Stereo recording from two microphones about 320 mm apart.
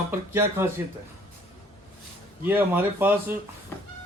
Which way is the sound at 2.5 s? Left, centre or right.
Centre.